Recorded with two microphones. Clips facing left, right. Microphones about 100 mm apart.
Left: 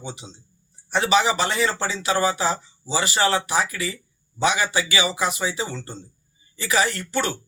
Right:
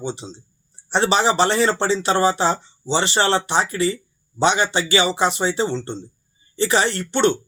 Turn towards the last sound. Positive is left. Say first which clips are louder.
# right 6 dB
turn(degrees=-30)  # may be behind; listen again after turning